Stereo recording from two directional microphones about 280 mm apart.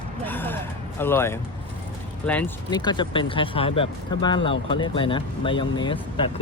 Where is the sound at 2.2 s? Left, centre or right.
Centre.